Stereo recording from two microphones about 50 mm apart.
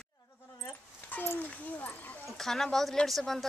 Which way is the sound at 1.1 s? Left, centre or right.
Left.